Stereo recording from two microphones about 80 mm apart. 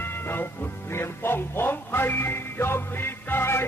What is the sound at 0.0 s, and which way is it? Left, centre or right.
Music, left.